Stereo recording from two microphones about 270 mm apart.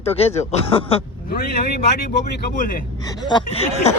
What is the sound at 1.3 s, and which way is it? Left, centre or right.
Speech, left.